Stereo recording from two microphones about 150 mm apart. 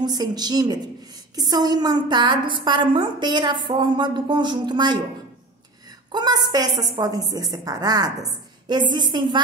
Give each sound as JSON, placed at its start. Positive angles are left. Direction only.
{"t": 0.0, "sound": "a woman's voice", "side_deg": -25}
{"t": 6.1, "sound": "a woman's voice", "side_deg": -25}